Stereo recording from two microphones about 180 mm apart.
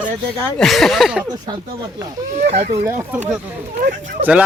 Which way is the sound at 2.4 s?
40° right (ahead or behind).